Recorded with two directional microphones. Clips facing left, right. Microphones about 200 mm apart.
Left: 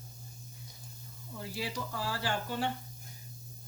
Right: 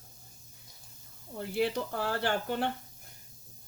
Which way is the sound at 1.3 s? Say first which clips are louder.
Right 8 dB; 55° right (ahead or behind).